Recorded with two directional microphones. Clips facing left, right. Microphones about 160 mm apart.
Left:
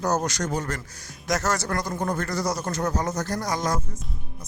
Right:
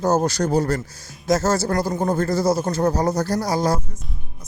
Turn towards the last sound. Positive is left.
turn(degrees=-35)  # may be behind; listen again after turning